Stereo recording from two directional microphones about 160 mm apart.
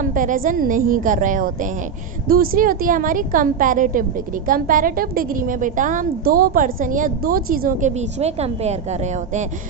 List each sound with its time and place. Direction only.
0.0 s a woman's voice: 55° right (ahead or behind)
2.2 s a woman's voice: 65° right (ahead or behind)
8.2 s a woman's voice: 40° right (ahead or behind)